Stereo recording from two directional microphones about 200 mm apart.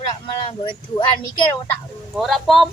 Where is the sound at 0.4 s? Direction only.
25° left (ahead or behind).